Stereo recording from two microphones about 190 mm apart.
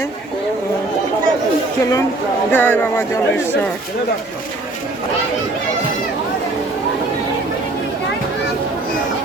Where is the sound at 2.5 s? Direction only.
10° left (ahead or behind).